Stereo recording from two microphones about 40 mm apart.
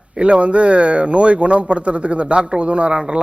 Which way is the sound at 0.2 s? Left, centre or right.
Right.